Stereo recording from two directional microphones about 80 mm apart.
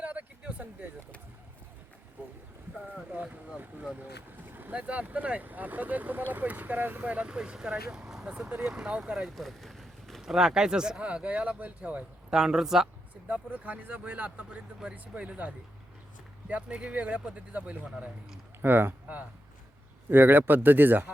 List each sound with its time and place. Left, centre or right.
0.0 s a sound: centre
2.2 s boat: right
2.7 s speech: centre
9.3 s speech: centre
13.2 s speech: centre
18.6 s speech: right